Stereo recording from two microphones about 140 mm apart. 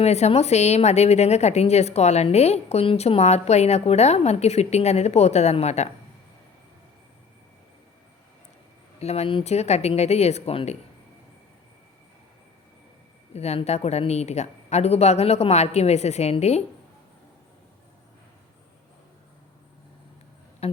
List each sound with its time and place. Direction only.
0.0 s a woman's voice: 50° left (ahead or behind)
9.0 s a woman's voice: 50° left (ahead or behind)
13.3 s a woman's voice: 50° left (ahead or behind)